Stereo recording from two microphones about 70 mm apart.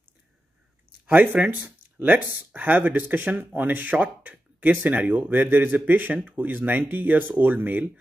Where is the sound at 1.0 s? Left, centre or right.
Right.